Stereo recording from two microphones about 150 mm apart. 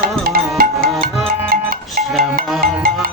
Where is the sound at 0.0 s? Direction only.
85° right.